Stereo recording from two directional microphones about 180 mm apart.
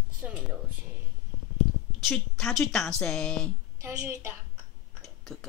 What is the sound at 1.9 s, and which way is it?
Speech, centre (ahead or behind).